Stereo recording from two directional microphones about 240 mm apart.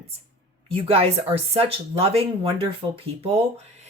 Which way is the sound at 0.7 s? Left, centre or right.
Right.